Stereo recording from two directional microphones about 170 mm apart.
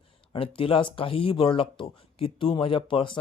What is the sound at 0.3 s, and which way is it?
Speech, 30° left (ahead or behind).